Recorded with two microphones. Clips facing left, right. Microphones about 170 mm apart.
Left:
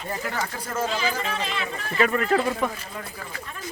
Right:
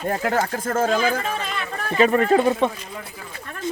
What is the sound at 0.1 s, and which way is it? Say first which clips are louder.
Speech: right 7 dB; 55° right (ahead or behind).